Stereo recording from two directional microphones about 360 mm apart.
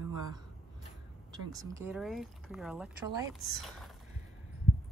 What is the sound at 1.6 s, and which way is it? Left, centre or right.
Speech, centre.